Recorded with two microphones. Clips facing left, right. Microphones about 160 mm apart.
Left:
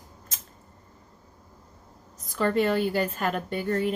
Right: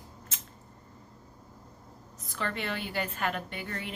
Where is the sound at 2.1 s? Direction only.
40° left (ahead or behind).